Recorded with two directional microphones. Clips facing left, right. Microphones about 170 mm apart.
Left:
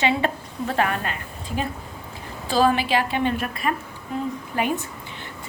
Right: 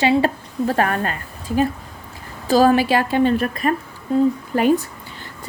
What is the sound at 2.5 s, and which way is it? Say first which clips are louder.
A woman's voice: right 5 dB; 45° right (ahead or behind).